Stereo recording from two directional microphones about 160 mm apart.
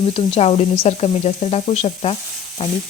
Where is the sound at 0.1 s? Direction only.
40° left (ahead or behind).